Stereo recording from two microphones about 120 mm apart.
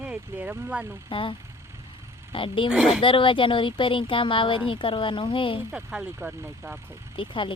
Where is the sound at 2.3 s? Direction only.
45° left (ahead or behind).